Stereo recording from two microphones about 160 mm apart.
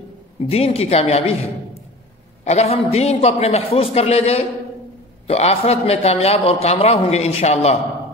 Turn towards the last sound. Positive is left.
turn(degrees=40)  # may be behind; listen again after turning